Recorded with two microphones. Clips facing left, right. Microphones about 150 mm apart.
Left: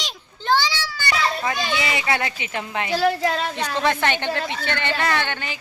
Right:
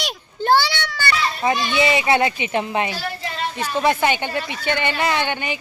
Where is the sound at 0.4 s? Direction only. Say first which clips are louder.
Right 4 dB; 55° right (ahead or behind).